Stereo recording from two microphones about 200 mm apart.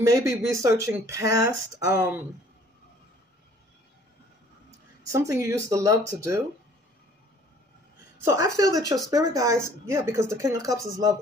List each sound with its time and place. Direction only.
0.0 s speech: 15° right (ahead or behind)
5.1 s speech: 15° right (ahead or behind)
8.2 s speech: 15° right (ahead or behind)